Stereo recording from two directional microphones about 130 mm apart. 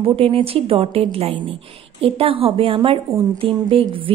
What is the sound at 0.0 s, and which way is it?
A woman's voice, 45° right (ahead or behind).